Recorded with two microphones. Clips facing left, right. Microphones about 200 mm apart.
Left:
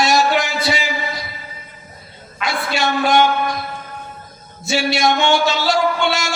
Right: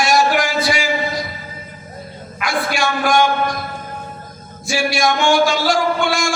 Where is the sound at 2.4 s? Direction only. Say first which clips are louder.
Right 1 dB; 25° left (ahead or behind).